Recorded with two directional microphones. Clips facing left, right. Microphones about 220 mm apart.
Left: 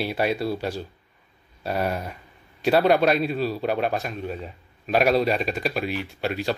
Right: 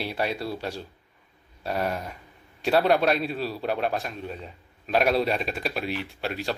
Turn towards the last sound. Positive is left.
turn(degrees=0)  # may be behind; listen again after turning